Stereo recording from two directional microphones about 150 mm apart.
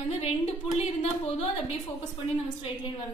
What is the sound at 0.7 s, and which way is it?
Speech, 40° left (ahead or behind).